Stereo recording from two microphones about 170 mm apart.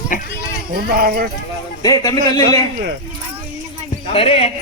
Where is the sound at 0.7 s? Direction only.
60° right (ahead or behind).